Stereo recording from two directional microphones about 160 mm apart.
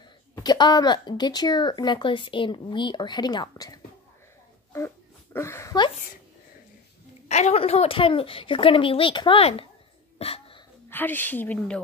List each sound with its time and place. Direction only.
0.4 s speech: 25° left (ahead or behind)
7.2 s a woman's voice: 45° left (ahead or behind)
10.1 s a sound: 40° left (ahead or behind)
10.9 s a woman's voice: 10° left (ahead or behind)